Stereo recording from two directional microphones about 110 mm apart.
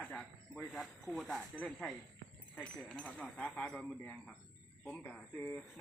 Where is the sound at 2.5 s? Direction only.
10° left (ahead or behind).